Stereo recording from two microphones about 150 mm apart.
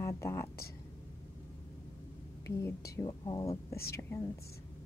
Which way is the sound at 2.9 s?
25° left (ahead or behind).